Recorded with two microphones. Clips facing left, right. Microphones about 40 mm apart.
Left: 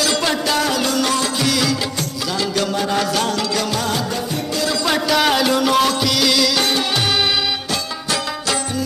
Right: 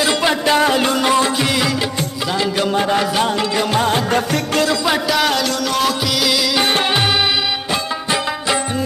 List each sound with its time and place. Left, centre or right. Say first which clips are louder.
0.0 s music: right 3 dB; right
3.7 s music of bollywood: right 5 dB; right
4.8 s music: even; centre
5.8 s music: left 1 dB; centre